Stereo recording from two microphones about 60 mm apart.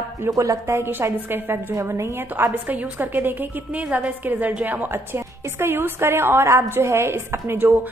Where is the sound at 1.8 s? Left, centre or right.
Right.